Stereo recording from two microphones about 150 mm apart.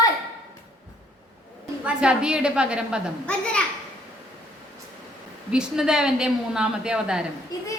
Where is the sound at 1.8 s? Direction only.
5° right (ahead or behind).